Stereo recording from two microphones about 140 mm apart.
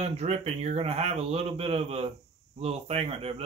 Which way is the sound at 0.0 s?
50° right (ahead or behind).